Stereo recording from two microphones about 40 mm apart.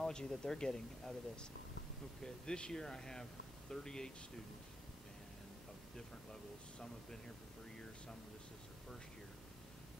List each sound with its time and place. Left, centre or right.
0.0 s speech: centre